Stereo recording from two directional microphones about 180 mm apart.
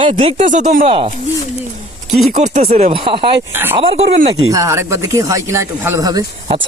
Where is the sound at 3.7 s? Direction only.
30° right (ahead or behind).